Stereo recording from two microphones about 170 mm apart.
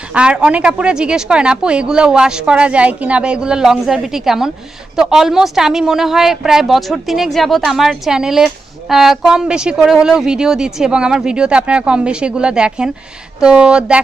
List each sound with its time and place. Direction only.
0.1 s speech: 5° right (ahead or behind)